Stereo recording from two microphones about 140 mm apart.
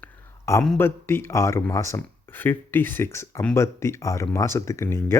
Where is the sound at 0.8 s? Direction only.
15° left (ahead or behind).